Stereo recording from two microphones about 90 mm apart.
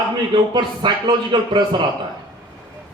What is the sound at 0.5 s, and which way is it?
Speech, 55° right (ahead or behind).